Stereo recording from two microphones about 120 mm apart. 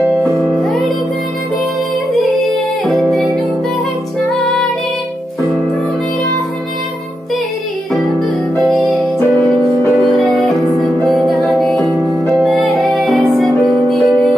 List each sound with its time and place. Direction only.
2.1 s music: centre (ahead or behind)
8.5 s music: centre (ahead or behind)
10.1 s music: centre (ahead or behind)